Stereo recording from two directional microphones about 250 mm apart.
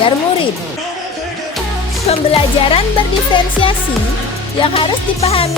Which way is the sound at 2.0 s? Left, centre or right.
Left.